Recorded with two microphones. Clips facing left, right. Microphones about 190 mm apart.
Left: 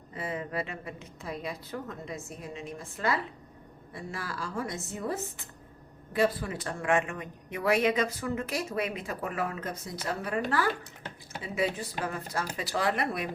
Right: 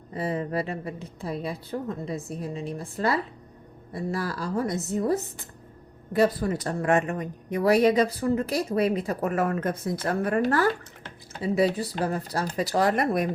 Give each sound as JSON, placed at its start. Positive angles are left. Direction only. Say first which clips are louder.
{"t": 0.1, "sound": "speech", "louder": "right 7 dB", "side_deg": -35}